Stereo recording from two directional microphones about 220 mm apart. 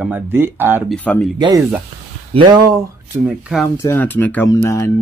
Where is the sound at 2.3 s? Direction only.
25° right (ahead or behind).